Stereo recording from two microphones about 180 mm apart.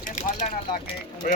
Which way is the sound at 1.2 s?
50° left (ahead or behind).